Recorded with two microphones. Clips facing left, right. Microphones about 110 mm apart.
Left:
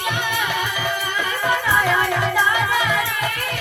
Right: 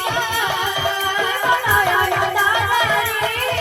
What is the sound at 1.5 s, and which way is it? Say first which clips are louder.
Music: right 2 dB; 20° right (ahead or behind).